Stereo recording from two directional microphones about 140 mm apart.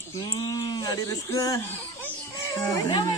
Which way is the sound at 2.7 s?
25° left (ahead or behind).